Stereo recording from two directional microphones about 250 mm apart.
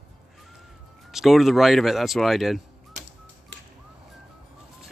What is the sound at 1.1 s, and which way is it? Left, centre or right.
Speech, centre.